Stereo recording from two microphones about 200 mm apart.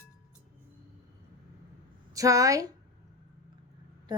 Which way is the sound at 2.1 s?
15° right (ahead or behind).